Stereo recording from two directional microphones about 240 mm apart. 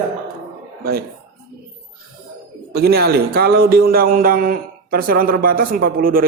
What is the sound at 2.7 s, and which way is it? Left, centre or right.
A man's voice, right.